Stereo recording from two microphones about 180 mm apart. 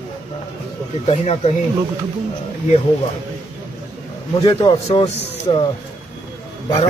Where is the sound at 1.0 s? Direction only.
35° left (ahead or behind).